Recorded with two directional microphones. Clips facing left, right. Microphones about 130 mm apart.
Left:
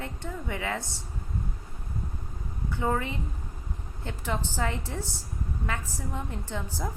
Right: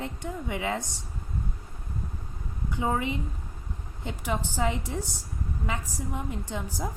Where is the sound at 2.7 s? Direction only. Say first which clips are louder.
Right 1 dB; 15° right (ahead or behind).